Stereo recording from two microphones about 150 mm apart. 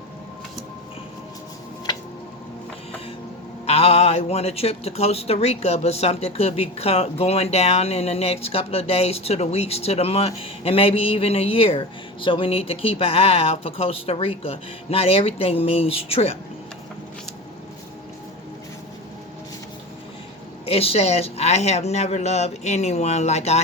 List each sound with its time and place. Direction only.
3.7 s speech: 45° left (ahead or behind)
20.7 s speech: 40° left (ahead or behind)